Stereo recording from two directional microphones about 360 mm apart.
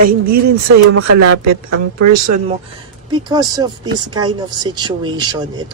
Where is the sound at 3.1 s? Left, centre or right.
Centre.